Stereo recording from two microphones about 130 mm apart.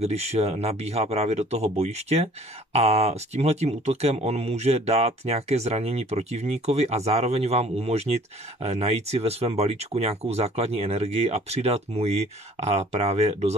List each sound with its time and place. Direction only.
0.0 s speech: 55° right (ahead or behind)